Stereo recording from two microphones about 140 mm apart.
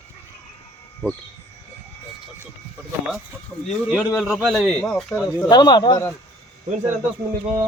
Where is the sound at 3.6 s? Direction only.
5° right (ahead or behind).